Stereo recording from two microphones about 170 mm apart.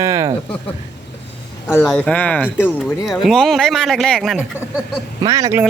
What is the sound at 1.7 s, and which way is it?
Speech, 5° left (ahead or behind).